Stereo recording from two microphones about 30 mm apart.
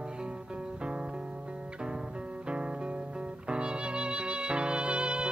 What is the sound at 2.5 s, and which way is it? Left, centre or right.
Music, right.